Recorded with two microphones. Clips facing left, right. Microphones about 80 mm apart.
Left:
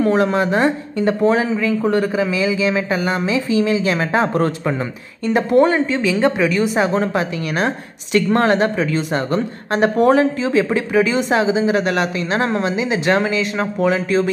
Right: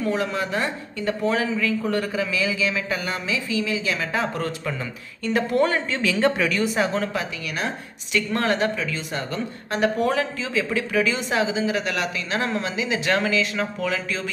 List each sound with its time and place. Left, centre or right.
0.1 s a woman's voice: left
5.2 s speech: left
7.5 s a woman's voice: left
11.7 s a woman's voice: left